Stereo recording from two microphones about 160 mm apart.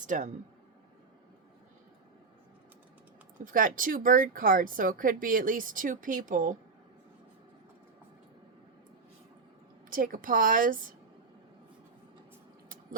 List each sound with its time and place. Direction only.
0.1 s speech: 55° right (ahead or behind)
3.3 s speech: 60° right (ahead or behind)
9.9 s speech: 60° right (ahead or behind)